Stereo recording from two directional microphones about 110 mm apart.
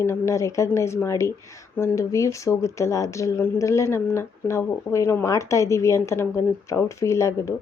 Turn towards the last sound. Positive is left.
turn(degrees=25)  # may be behind; listen again after turning